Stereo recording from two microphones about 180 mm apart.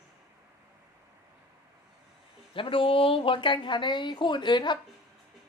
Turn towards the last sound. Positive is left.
turn(degrees=25)  # may be behind; listen again after turning